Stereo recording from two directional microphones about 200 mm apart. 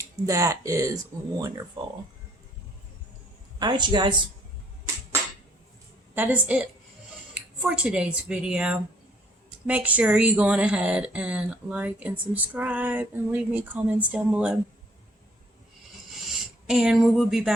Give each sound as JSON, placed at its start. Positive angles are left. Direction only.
{"t": 0.3, "sound": "speech", "side_deg": -15}
{"t": 3.6, "sound": "a man's voice", "side_deg": -20}
{"t": 6.1, "sound": "speech", "side_deg": -10}
{"t": 16.6, "sound": "speech", "side_deg": -5}